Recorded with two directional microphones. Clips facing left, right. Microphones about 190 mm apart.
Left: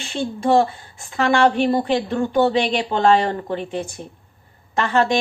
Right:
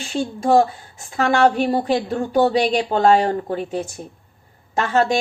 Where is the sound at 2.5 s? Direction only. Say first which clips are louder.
Right 2 dB; 40° right (ahead or behind).